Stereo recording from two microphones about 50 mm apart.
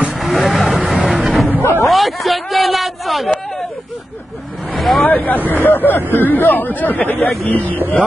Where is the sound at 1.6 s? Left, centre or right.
Left.